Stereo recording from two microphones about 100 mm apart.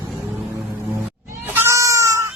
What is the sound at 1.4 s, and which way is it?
Cat, 20° right (ahead or behind).